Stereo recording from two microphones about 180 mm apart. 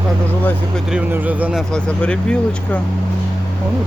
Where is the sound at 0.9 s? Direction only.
10° right (ahead or behind).